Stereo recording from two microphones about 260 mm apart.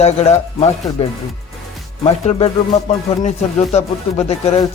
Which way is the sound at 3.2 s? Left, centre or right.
Left.